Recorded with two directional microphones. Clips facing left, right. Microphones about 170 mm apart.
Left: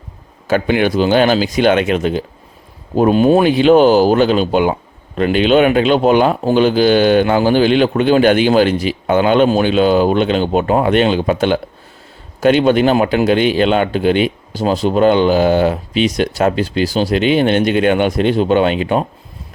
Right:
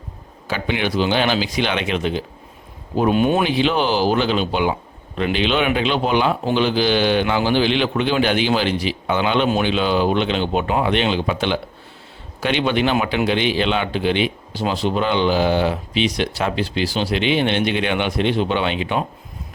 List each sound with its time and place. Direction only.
0.4 s speech: 50° left (ahead or behind)